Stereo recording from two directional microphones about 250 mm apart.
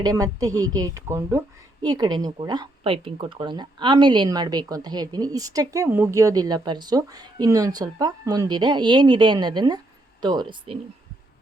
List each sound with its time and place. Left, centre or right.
0.0 s speech: centre